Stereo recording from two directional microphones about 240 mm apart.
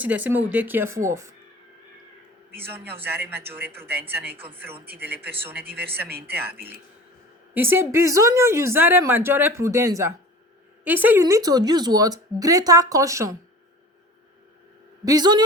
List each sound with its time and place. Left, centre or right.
0.0 s speech: centre
3.0 s speech: centre
7.5 s speech: centre
15.0 s speech: centre